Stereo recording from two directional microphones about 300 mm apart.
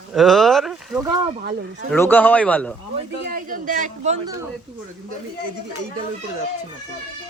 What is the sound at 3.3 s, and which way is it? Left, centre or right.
Speech, right.